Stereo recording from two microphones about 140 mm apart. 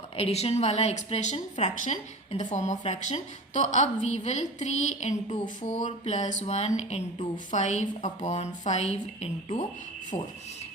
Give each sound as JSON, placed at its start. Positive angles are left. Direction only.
{"t": 0.2, "sound": "a woman's voice", "side_deg": 45}